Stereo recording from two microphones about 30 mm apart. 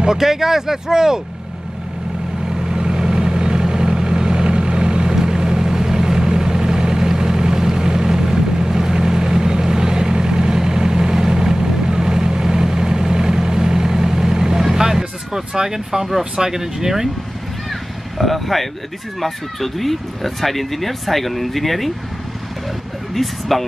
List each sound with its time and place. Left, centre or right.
0.2 s speech: centre
2.6 s vehicle: right
16.3 s speech: centre
17.6 s vehicle: centre
19.1 s speech: centre
23.2 s speech: centre